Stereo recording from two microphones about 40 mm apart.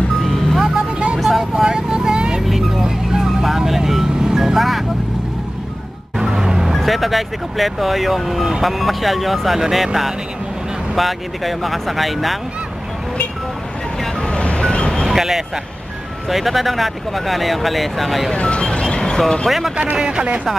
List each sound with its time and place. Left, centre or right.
0.2 s music: centre
0.7 s music: right
1.7 s vehicle: right
2.4 s vehicle: centre
2.8 s vehicle: centre
3.4 s music: centre
6.1 s vehicle: centre
6.8 s speech: centre
11.0 s speech: centre
14.2 s music: left
15.0 s speech: centre
18.3 s music: left
20.0 s speech: centre